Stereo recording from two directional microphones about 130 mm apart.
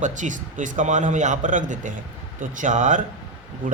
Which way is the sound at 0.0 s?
75° right (ahead or behind).